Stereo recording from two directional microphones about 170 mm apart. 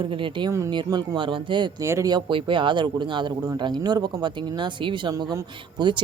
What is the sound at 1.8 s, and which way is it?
Speech, 20° right (ahead or behind).